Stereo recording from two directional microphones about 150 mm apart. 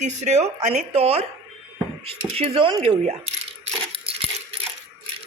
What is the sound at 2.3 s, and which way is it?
Speech, 35° right (ahead or behind).